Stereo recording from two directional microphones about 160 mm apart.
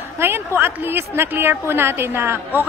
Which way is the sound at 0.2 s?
15° right (ahead or behind).